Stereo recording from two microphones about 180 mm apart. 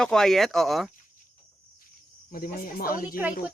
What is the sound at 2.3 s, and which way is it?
Speech, 50° left (ahead or behind).